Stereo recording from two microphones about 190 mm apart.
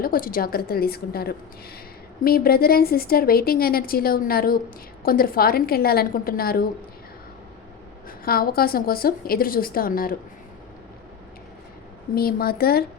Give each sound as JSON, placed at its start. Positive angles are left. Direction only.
{"t": 0.0, "sound": "a woman's voice", "side_deg": 50}
{"t": 8.2, "sound": "a woman's voice", "side_deg": 50}
{"t": 12.1, "sound": "a woman's voice", "side_deg": 55}